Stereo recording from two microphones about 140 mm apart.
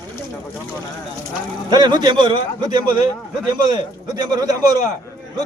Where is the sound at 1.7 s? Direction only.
30° right (ahead or behind).